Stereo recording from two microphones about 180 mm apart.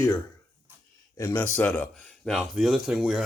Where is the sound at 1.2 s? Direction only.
10° left (ahead or behind).